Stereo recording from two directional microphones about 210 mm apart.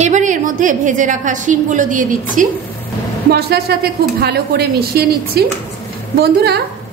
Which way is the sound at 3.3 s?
50° right (ahead or behind).